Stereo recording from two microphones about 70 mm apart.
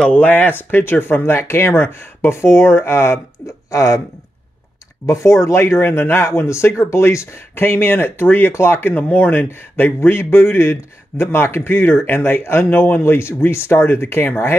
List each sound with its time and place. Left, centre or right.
0.1 s speech: left
5.0 s speech: left